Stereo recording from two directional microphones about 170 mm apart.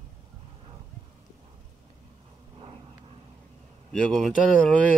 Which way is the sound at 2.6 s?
35° right (ahead or behind).